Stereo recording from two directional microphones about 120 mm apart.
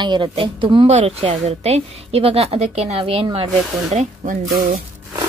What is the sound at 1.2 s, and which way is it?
A woman's voice, 60° right (ahead or behind).